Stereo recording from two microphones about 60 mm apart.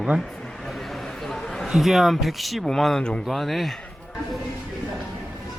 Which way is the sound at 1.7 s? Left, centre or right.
Centre.